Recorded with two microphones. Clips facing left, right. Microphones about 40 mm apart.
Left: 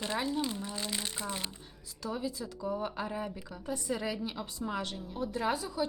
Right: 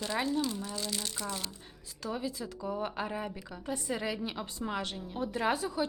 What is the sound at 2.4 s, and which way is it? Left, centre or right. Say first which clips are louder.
A woman's voice: even; centre.